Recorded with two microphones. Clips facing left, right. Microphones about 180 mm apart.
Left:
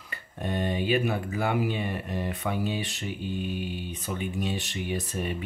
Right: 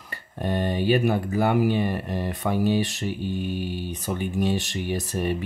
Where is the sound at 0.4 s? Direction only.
40° right (ahead or behind).